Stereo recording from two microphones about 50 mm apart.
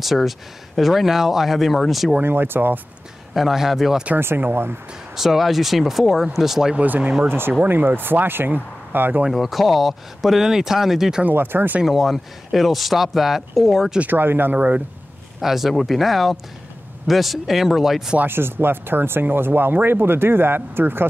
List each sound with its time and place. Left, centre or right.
0.0 s speech: centre
2.2 s speech: right
3.3 s speech: centre
5.1 s speech: centre
6.8 s speech: right
7.2 s speech: right
9.3 s speech: centre
11.2 s speech: right
11.8 s speech: centre
14.0 s speech: right
15.4 s speech: centre
18.2 s speech: right